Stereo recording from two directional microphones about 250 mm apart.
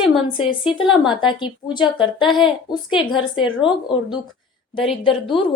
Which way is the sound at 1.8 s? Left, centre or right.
Centre.